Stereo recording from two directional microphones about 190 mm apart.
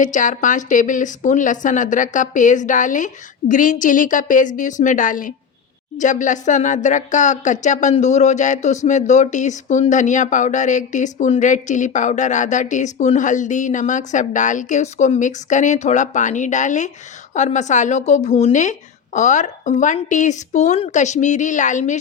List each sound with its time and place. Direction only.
0.0 s a woman's voice: 40° left (ahead or behind)